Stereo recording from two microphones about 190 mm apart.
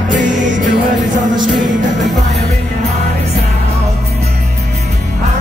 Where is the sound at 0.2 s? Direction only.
40° right (ahead or behind).